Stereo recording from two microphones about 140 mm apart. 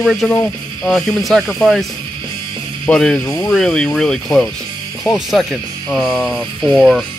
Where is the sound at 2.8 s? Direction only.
5° left (ahead or behind).